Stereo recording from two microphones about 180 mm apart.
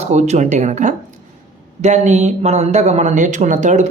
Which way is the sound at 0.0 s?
40° right (ahead or behind).